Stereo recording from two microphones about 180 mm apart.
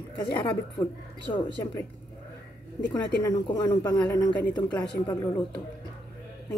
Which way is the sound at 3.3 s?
25° left (ahead or behind).